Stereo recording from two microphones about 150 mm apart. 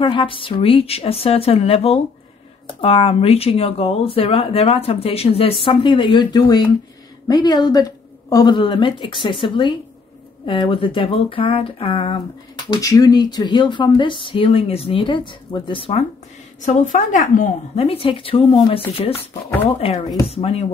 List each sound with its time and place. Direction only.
0.0 s speech: 35° left (ahead or behind)
16.6 s a woman's voice: 55° left (ahead or behind)
17.8 s speech: 40° left (ahead or behind)